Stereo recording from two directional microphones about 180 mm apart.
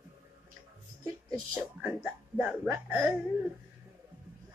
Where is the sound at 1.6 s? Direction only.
5° right (ahead or behind).